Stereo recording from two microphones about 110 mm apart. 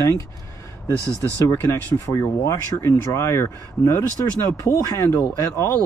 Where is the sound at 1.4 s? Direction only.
20° left (ahead or behind).